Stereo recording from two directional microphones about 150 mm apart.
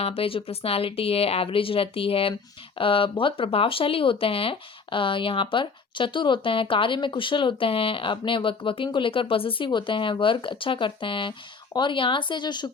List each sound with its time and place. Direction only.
0.0 s speech: 40° left (ahead or behind)